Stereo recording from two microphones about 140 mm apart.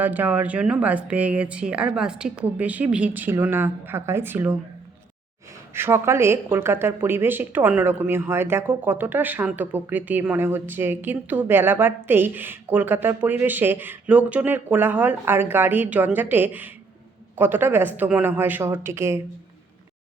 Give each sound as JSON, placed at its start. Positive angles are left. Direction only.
{"t": 0.0, "sound": "speech", "side_deg": -15}
{"t": 5.7, "sound": "speech", "side_deg": -15}